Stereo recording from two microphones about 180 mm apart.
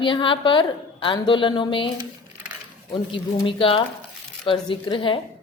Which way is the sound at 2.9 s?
30° left (ahead or behind).